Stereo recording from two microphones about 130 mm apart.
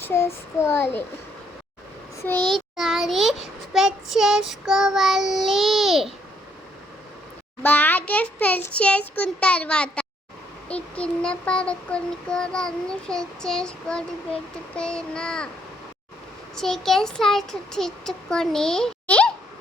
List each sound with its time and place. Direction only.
0.0 s child singing: 20° left (ahead or behind)
2.5 s a child's voice: centre (ahead or behind)
7.6 s child singing: 15° left (ahead or behind)
16.6 s a child's voice: centre (ahead or behind)